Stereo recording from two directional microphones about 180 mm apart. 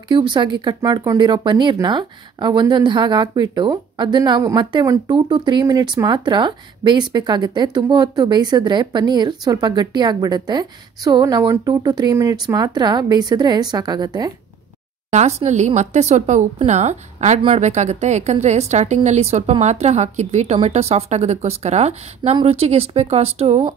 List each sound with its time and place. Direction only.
0.1 s speech: 25° right (ahead or behind)
15.0 s speech: 40° right (ahead or behind)